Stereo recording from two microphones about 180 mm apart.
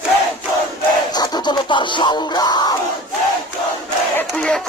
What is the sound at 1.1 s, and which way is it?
Crowd, 25° left (ahead or behind).